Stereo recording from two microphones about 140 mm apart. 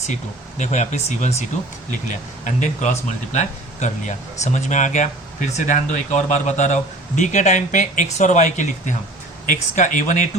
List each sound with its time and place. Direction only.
0.6 s speech: 55° left (ahead or behind)
1.9 s speech: 65° left (ahead or behind)